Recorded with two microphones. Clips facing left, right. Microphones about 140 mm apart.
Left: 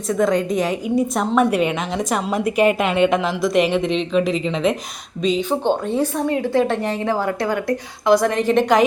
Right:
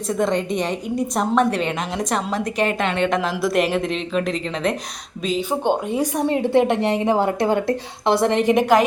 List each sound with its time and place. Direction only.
0.1 s a woman's voice: centre (ahead or behind)
6.2 s a woman's voice: 25° right (ahead or behind)